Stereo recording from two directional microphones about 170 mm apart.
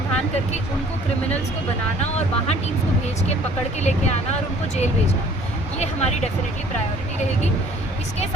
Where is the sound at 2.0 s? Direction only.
40° left (ahead or behind).